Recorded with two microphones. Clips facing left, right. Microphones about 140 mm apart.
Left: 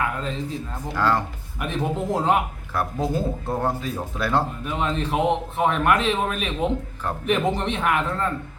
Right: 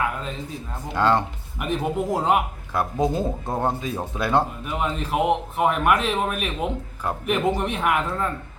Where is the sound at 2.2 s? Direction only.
10° right (ahead or behind).